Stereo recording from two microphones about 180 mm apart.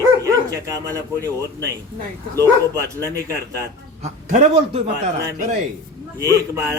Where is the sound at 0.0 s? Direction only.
20° right (ahead or behind).